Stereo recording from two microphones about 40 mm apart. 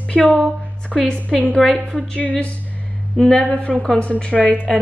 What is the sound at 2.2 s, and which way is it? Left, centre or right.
Speech, left.